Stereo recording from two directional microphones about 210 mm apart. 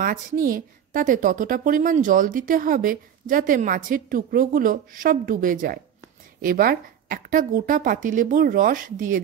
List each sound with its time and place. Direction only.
0.0 s a woman's voice: 40° right (ahead or behind)